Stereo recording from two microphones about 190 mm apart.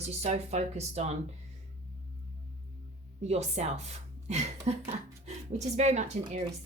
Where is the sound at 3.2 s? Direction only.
35° right (ahead or behind).